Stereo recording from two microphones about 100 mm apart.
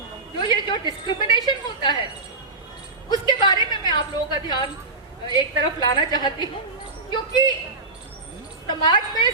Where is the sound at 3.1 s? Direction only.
45° left (ahead or behind).